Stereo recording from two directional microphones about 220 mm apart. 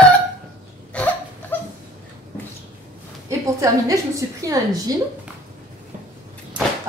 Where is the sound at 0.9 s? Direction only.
5° left (ahead or behind).